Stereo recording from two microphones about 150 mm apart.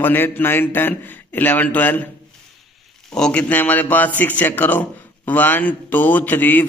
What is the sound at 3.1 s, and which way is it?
Speech, 5° left (ahead or behind).